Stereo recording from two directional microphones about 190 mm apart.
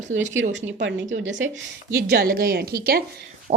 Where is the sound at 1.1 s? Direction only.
80° right.